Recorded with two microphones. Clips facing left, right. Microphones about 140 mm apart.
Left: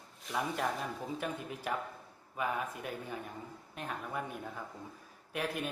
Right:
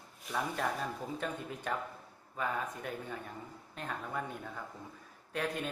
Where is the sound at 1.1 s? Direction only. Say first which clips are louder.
Even; 10° left (ahead or behind).